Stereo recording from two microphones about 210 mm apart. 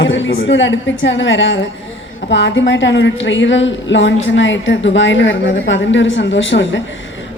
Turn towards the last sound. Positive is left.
turn(degrees=60)  # may be behind; listen again after turning